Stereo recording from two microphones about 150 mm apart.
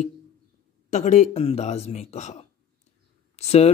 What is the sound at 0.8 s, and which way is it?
Speech, 50° left (ahead or behind).